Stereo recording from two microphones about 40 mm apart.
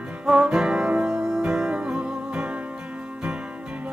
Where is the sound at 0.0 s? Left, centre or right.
Right.